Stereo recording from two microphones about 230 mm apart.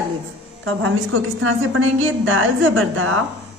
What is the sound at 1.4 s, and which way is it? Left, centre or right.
A woman's voice, right.